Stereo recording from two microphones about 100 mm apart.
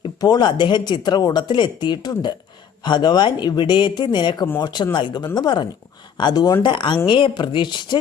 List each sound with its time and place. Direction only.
0.2 s speech: 45° left (ahead or behind)